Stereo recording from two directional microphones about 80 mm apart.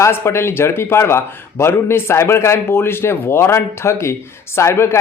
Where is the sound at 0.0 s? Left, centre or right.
Left.